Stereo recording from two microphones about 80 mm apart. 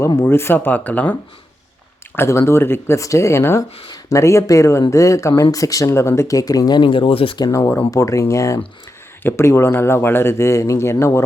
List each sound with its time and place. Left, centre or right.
0.2 s speech: left
2.1 s speech: left
5.9 s speech: left
7.4 s speech: left